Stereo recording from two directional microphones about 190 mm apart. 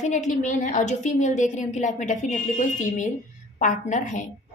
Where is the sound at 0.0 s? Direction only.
40° left (ahead or behind).